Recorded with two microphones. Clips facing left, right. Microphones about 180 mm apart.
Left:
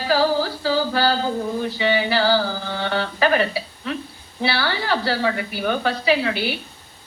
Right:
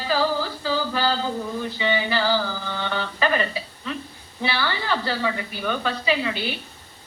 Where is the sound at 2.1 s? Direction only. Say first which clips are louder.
Left 4 dB; 35° left (ahead or behind).